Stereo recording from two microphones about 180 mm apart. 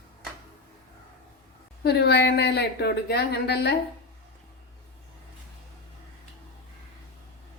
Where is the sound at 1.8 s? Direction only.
65° left (ahead or behind).